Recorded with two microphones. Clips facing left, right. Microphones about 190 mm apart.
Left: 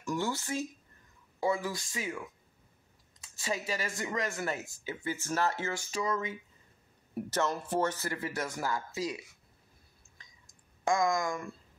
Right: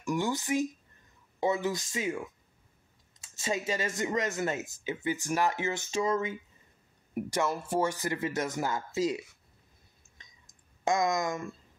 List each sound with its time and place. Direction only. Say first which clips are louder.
0.0 s speech: right 3 dB; 15° right (ahead or behind)
7.2 s speech: right 1 dB; 15° right (ahead or behind)
10.1 s a sound: right 1 dB; 20° right (ahead or behind)